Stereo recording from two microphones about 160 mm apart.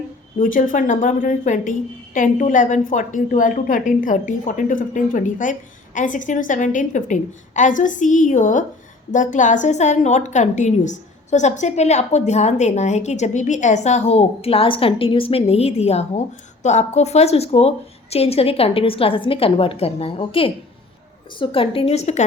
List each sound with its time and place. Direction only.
0.3 s a woman's voice: 55° left (ahead or behind)